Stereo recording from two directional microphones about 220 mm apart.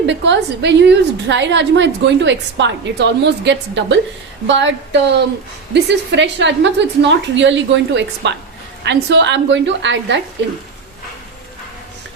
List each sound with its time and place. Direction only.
0.0 s a woman's voice: 55° right (ahead or behind)